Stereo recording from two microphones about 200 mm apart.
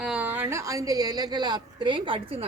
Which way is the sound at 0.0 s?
5° right (ahead or behind).